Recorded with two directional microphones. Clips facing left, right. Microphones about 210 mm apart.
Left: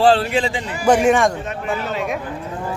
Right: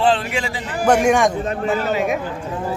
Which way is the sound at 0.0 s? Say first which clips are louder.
Left 4 dB; 35° left (ahead or behind).